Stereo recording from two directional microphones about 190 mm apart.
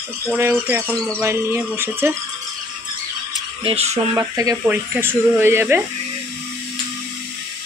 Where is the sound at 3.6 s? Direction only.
35° right (ahead or behind).